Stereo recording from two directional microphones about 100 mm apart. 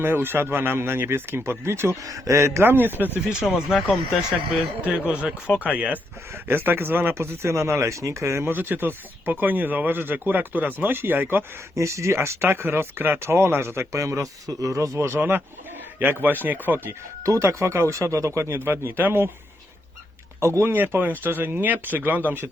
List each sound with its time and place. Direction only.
0.0 s speech: 20° right (ahead or behind)
3.2 s speech: 5° right (ahead or behind)
4.8 s speech: 15° right (ahead or behind)
20.6 s speech: 20° right (ahead or behind)